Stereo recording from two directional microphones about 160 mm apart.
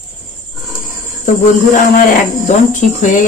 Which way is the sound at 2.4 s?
50° left (ahead or behind).